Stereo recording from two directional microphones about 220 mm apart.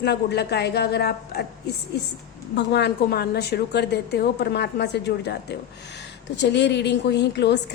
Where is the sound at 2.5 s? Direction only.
50° left (ahead or behind).